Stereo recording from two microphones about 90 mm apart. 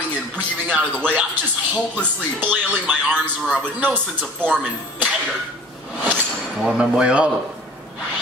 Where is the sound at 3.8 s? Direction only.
20° right (ahead or behind).